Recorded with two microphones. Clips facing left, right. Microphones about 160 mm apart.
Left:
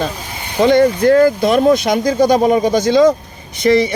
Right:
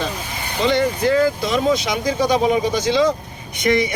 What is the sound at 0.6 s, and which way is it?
Speech, 50° left (ahead or behind).